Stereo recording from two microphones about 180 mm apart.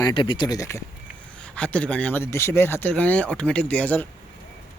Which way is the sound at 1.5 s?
5° left (ahead or behind).